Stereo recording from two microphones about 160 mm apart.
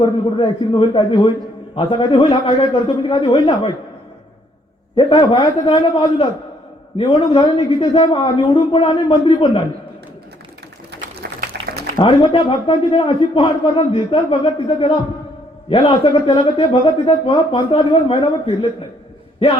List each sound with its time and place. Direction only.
0.0 s a man's voice: 30° left (ahead or behind)
4.9 s a man's voice: 35° left (ahead or behind)
11.9 s a man's voice: 30° left (ahead or behind)